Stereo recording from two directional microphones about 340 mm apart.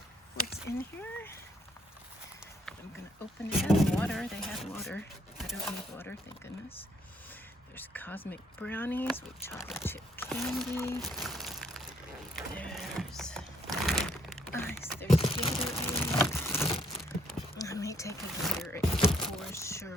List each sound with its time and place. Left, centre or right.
0.4 s a sound: left
0.8 s speech: centre
3.6 s speech: centre
7.8 s speech: centre
10.8 s crumpling: centre
12.4 s speech: centre
13.7 s a sound: centre
15.6 s crumpling: centre
19.1 s a sound: centre